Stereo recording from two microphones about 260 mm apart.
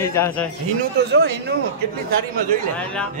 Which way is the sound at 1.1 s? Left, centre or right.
Right.